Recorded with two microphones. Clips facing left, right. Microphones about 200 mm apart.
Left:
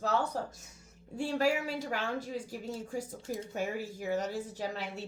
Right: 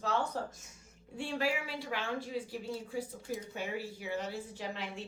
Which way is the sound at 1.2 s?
40° left (ahead or behind).